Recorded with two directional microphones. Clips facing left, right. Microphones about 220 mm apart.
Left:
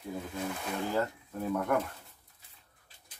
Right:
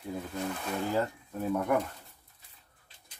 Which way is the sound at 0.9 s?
10° right (ahead or behind).